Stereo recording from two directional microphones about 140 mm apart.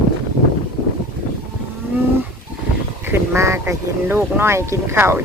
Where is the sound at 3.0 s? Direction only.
20° right (ahead or behind).